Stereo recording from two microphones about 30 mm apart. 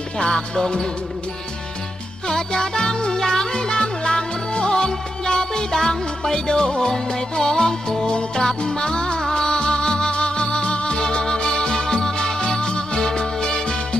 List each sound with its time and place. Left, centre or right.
0.2 s music: left
2.2 s music: left